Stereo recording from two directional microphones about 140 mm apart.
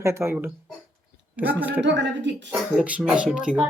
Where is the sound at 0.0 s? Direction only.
20° right (ahead or behind).